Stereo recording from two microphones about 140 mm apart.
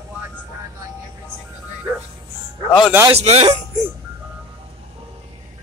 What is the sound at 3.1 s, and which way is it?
Speech, 50° right (ahead or behind).